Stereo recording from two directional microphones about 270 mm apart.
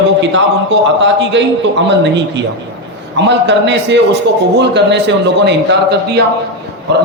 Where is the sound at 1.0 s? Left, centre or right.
Right.